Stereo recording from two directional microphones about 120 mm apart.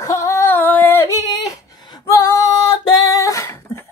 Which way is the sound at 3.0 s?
25° left (ahead or behind).